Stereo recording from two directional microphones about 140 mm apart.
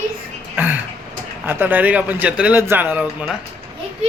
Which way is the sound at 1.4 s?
15° right (ahead or behind).